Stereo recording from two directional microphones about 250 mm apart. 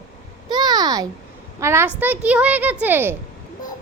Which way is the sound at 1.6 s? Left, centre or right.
Centre.